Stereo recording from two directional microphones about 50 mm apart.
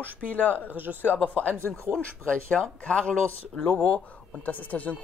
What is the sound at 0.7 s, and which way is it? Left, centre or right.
Speech, right.